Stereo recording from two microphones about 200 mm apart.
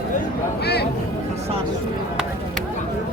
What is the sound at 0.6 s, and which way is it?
Speech, 55° left (ahead or behind).